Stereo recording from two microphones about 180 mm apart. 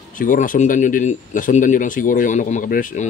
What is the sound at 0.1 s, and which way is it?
A man's voice, 45° left (ahead or behind).